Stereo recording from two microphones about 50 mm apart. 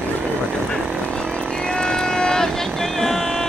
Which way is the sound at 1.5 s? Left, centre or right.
Centre.